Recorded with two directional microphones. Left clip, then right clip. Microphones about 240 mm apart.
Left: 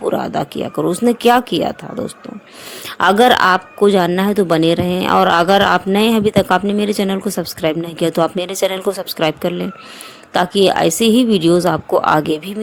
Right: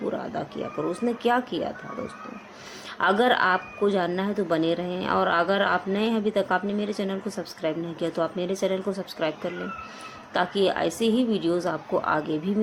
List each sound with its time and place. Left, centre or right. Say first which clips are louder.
0.1 s speech: left 12 dB; left
3.0 s speech: left 10 dB; left